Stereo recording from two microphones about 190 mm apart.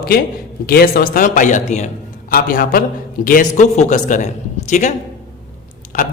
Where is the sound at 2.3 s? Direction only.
50° left (ahead or behind).